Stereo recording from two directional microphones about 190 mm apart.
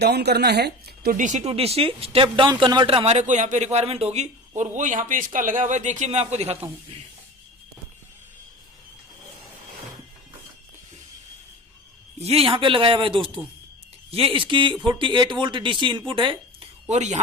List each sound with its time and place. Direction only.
0.0 s speech: 60° right (ahead or behind); by 6.7 s 35° right (ahead or behind)
12.2 s speech: 30° right (ahead or behind)
16.9 s speech: 35° right (ahead or behind)